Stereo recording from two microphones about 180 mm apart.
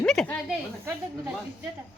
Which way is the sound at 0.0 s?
5° left (ahead or behind).